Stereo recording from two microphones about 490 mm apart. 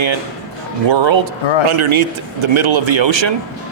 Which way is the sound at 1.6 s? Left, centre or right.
Right.